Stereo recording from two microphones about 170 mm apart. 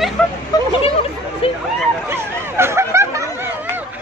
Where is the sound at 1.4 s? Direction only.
35° left (ahead or behind).